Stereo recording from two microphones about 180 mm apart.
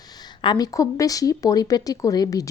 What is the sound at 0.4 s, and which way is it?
Speech, 20° left (ahead or behind).